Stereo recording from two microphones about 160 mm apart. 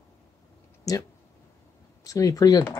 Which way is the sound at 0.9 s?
20° left (ahead or behind).